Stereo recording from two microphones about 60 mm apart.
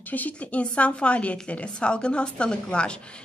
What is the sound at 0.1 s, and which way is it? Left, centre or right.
Speech, left.